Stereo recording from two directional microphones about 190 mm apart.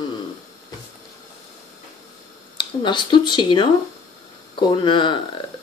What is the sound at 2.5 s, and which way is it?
Speech, 25° left (ahead or behind).